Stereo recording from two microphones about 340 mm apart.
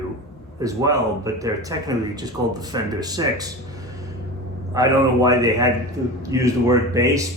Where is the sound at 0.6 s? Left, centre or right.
Centre.